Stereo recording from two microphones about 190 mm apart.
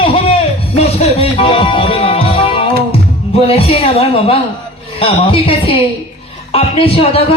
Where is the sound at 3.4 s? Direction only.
30° left (ahead or behind).